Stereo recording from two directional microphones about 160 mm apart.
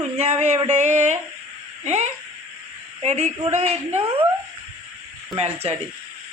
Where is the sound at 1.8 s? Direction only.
45° right (ahead or behind).